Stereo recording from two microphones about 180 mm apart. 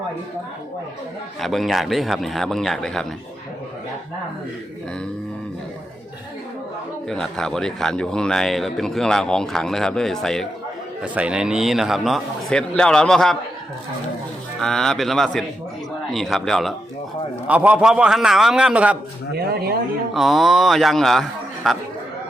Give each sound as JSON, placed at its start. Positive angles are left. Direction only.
{"t": 1.4, "sound": "speech", "side_deg": 0}
{"t": 7.1, "sound": "speech", "side_deg": 5}
{"t": 14.6, "sound": "speech", "side_deg": 0}
{"t": 19.3, "sound": "speech", "side_deg": -60}
{"t": 20.1, "sound": "speech", "side_deg": 0}